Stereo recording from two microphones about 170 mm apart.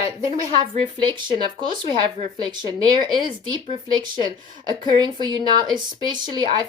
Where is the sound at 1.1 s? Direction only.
25° right (ahead or behind).